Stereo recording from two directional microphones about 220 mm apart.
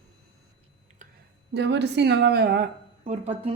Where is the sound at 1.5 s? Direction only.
50° right (ahead or behind).